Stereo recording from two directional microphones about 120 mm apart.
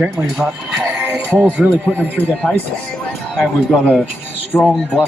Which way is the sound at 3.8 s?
10° left (ahead or behind).